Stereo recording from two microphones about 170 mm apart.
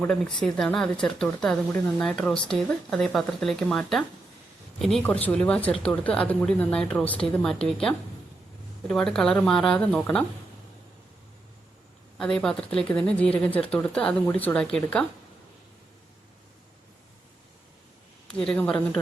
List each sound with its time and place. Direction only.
0.0 s speech: 5° left (ahead or behind)
12.1 s speech: 5° left (ahead or behind)
18.3 s speech: 5° left (ahead or behind)